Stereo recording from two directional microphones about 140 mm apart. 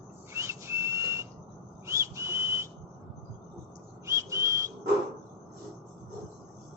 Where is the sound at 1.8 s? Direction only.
20° right (ahead or behind).